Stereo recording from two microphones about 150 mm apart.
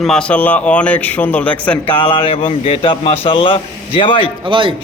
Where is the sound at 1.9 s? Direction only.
35° left (ahead or behind).